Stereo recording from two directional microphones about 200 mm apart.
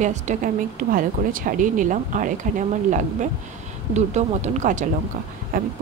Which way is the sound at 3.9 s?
35° right (ahead or behind).